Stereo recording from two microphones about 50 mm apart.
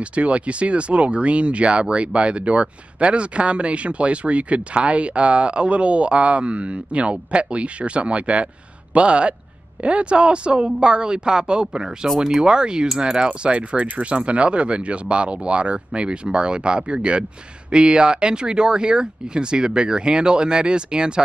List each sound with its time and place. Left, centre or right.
0.0 s speech: right